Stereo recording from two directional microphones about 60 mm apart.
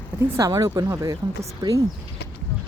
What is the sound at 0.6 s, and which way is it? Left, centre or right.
Speech, right.